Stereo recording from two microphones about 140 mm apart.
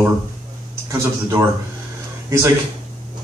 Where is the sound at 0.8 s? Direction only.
20° right (ahead or behind).